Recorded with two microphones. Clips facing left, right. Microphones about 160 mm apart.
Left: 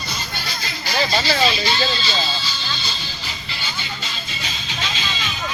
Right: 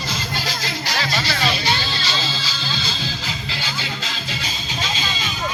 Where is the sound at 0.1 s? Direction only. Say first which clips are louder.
Right 3 dB; 90° right.